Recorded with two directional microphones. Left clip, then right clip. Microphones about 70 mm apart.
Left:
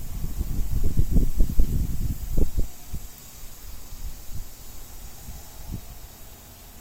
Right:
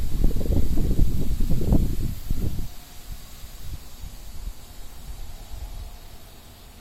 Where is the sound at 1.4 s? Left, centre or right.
Centre.